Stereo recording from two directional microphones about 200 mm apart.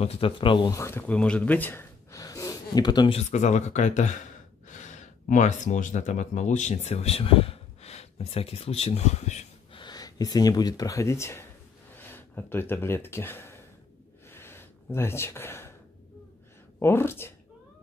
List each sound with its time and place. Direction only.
0.0 s speech: 30° left (ahead or behind)
3.2 s speech: 35° left (ahead or behind); by 13.6 s 10° left (ahead or behind)
14.3 s a sound: 10° left (ahead or behind)
16.8 s speech: 10° left (ahead or behind)